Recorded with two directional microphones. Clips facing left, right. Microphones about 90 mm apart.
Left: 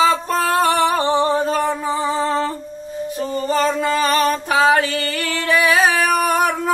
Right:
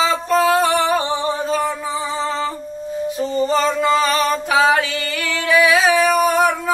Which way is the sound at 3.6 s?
50° left (ahead or behind).